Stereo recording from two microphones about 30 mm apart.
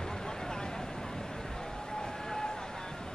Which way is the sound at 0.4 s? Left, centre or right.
Left.